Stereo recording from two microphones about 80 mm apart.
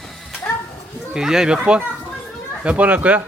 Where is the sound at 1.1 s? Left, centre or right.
Centre.